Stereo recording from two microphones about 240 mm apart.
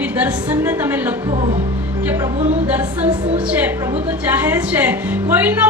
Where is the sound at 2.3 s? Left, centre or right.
Right.